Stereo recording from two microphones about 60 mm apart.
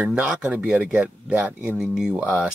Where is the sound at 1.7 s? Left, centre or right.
Centre.